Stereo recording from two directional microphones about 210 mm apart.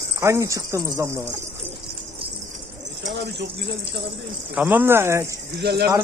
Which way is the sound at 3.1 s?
55° right (ahead or behind).